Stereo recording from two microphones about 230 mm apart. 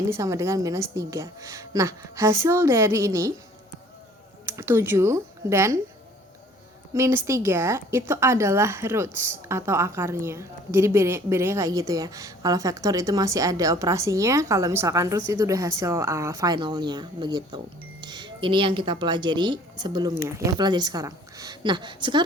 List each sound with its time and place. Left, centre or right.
0.1 s a woman's voice: centre
4.4 s speech: centre
6.9 s a woman's voice: centre